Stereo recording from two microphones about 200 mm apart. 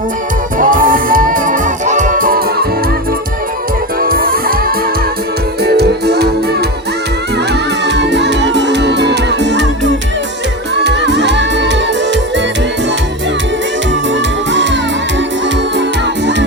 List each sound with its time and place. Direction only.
0.6 s music: 40° right (ahead or behind)
4.0 s music: 45° right (ahead or behind)
7.9 s music: 60° right (ahead or behind)
14.1 s music: 65° right (ahead or behind)
15.8 s music: 60° right (ahead or behind)